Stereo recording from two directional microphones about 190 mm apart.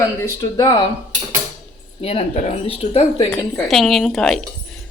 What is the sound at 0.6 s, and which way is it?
Speech, 20° left (ahead or behind).